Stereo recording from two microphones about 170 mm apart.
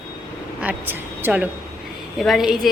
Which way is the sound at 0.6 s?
10° right (ahead or behind).